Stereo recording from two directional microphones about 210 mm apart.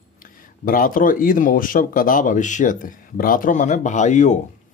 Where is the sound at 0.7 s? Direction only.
40° left (ahead or behind).